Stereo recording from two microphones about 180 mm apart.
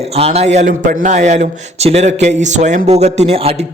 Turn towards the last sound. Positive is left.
turn(degrees=-35)  # may be behind; listen again after turning